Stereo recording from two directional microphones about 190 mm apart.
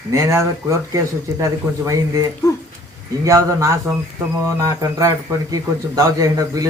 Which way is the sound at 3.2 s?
15° right (ahead or behind).